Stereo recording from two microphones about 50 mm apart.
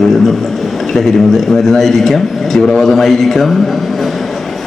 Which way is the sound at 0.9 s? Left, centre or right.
Centre.